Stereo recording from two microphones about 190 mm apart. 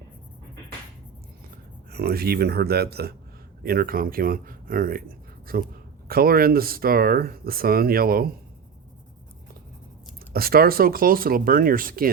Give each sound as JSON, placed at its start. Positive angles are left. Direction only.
{"t": 1.9, "sound": "speech", "side_deg": -55}
{"t": 10.3, "sound": "speech", "side_deg": -50}